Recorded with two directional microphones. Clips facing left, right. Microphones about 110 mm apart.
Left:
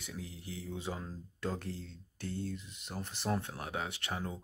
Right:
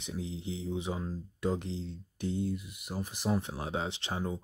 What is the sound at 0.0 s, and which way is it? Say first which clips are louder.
Speech: right 7 dB; 25° right (ahead or behind).